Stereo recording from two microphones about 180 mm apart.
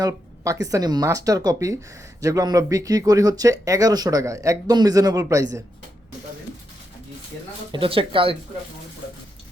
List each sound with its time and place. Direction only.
0.0 s speech: 20° right (ahead or behind)
7.7 s speech: 30° right (ahead or behind)